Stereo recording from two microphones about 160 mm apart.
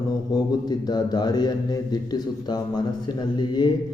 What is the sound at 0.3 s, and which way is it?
A man's voice, 25° left (ahead or behind).